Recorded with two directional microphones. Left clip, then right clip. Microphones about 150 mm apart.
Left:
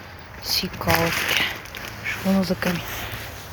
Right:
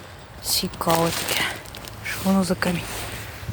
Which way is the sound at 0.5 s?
25° right (ahead or behind).